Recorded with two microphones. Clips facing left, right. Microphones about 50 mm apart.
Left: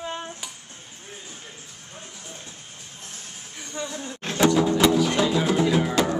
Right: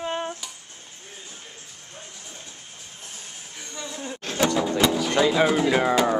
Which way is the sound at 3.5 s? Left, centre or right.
Left.